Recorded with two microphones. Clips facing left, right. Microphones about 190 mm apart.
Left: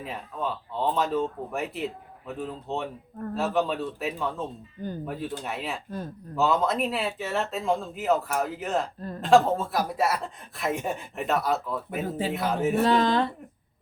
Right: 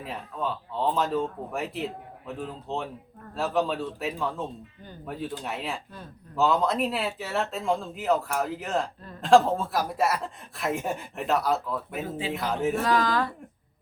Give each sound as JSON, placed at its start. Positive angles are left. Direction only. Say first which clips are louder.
{"t": 0.0, "sound": "speech", "louder": "even", "side_deg": 0}
{"t": 12.0, "sound": "speech", "louder": "left 3 dB", "side_deg": 40}
{"t": 12.3, "sound": "speech", "louder": "left 1 dB", "side_deg": 0}
{"t": 12.8, "sound": "speech", "louder": "left 5 dB", "side_deg": 25}